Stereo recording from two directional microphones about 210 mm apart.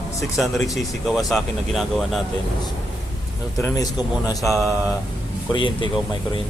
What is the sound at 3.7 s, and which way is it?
Speech, 15° left (ahead or behind).